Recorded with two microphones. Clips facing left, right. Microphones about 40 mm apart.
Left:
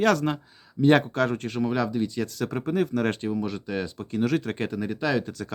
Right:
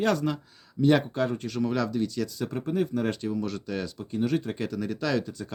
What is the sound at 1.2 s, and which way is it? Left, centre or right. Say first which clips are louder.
Speech: left 3 dB; left.